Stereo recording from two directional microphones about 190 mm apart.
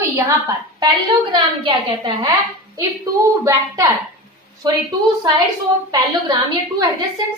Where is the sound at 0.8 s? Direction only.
25° right (ahead or behind).